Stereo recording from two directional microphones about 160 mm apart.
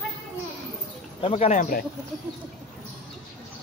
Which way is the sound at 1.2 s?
40° left (ahead or behind).